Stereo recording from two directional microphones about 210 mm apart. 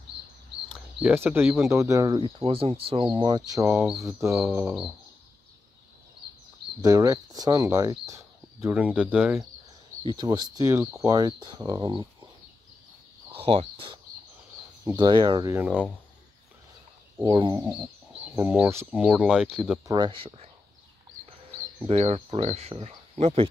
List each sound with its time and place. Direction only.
0.9 s speech: 10° right (ahead or behind)
2.4 s speech: 25° right (ahead or behind); by 4.8 s 10° right (ahead or behind)
6.8 s speech: 15° right (ahead or behind)
10.1 s speech: 20° right (ahead or behind)
13.3 s speech: 25° right (ahead or behind)
15.0 s speech: 20° right (ahead or behind)
17.2 s speech: 25° right (ahead or behind)
18.3 s speech: 5° right (ahead or behind)
19.9 s speech: 25° right (ahead or behind)
21.8 s speech: 25° right (ahead or behind)